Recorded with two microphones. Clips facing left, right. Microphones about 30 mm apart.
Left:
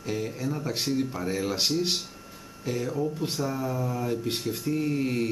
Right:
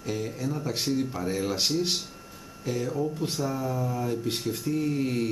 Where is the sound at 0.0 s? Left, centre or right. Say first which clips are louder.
Even; centre.